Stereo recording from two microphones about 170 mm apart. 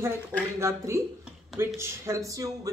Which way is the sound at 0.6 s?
15° right (ahead or behind).